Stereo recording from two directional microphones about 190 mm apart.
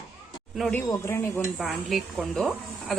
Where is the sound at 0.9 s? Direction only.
15° left (ahead or behind).